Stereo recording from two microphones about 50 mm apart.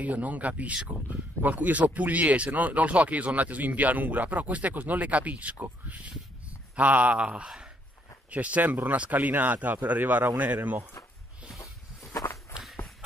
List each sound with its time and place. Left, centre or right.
0.0 s speech: right
6.7 s speech: right
7.4 s speech: centre
8.3 s speech: right
12.1 s walk: left